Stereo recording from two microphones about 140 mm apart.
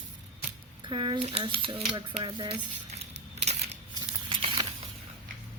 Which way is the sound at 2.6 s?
50° right (ahead or behind).